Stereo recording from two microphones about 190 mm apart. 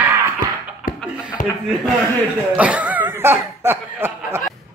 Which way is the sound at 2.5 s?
5° right (ahead or behind).